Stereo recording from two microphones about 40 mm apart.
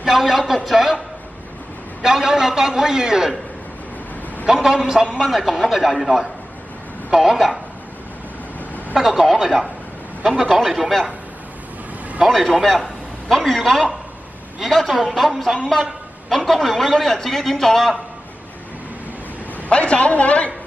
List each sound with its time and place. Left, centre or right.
0.0 s a man's voice: centre
4.5 s a man's voice: centre
9.0 s speech: centre
12.3 s a man's voice: centre
19.7 s a man's voice: left